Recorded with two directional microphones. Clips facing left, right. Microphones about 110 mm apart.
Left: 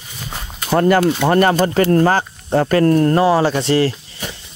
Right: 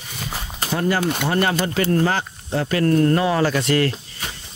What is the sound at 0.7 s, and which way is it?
Speech, 60° left (ahead or behind).